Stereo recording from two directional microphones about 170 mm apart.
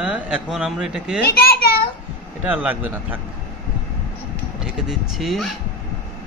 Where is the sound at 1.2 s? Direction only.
65° left (ahead or behind).